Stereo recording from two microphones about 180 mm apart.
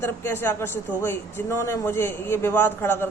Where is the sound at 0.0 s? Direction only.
10° left (ahead or behind).